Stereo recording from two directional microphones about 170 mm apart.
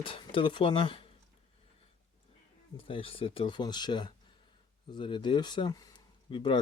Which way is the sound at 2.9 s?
30° left (ahead or behind).